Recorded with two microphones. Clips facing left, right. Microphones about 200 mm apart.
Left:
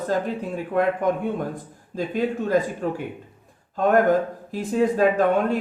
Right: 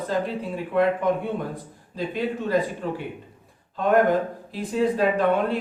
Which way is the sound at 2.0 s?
45° left (ahead or behind).